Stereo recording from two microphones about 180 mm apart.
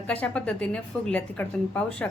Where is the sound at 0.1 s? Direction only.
10° left (ahead or behind).